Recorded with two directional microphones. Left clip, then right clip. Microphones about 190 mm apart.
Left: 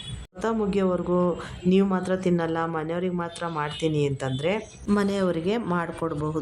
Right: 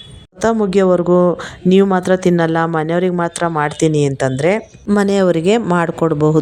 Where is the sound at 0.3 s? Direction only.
40° right (ahead or behind).